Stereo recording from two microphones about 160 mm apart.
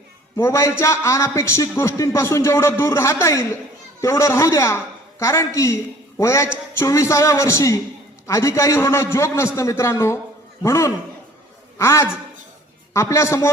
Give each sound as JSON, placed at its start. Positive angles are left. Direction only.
{"t": 0.3, "sound": "a man's voice", "side_deg": 15}